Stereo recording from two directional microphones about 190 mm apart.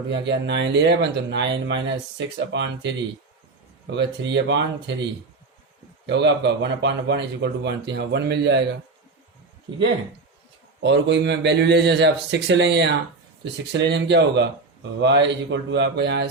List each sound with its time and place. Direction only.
0.3 s speech: 65° right (ahead or behind)
6.1 s speech: 65° right (ahead or behind)
10.8 s a man's voice: 70° right (ahead or behind)